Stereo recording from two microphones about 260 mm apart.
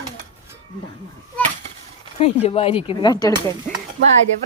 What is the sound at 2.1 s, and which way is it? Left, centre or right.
Speech, left.